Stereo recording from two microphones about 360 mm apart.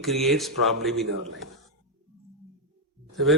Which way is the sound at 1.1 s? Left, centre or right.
Right.